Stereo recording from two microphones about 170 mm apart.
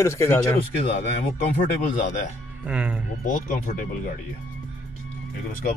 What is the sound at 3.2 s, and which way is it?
Speech, 50° left (ahead or behind).